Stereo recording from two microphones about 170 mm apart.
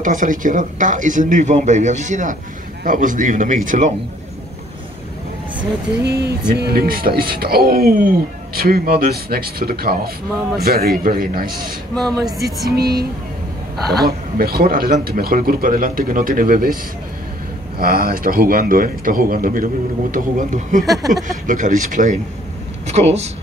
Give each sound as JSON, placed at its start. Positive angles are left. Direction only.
{"t": 0.0, "sound": "speech", "side_deg": -50}
{"t": 6.5, "sound": "speech", "side_deg": -65}
{"t": 11.9, "sound": "speech", "side_deg": 5}
{"t": 12.7, "sound": "speech", "side_deg": -65}
{"t": 14.0, "sound": "speech", "side_deg": -60}
{"t": 17.7, "sound": "speech", "side_deg": -60}
{"t": 20.9, "sound": "speech", "side_deg": 0}
{"t": 21.2, "sound": "speech", "side_deg": -50}